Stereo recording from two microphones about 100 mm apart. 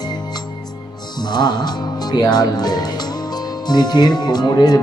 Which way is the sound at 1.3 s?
45° left (ahead or behind).